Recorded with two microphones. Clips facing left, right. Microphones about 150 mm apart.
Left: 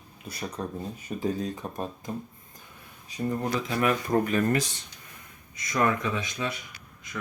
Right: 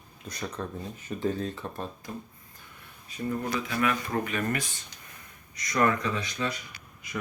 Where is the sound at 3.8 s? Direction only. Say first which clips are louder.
Left 4 dB; 35° left (ahead or behind).